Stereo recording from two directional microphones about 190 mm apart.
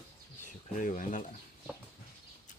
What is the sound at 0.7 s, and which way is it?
Speech, 45° left (ahead or behind).